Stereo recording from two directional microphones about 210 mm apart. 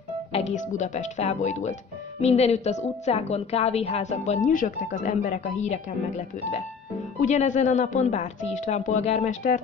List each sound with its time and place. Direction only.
0.5 s a woman's voice: 35° left (ahead or behind)
7.2 s a woman's voice: 35° left (ahead or behind)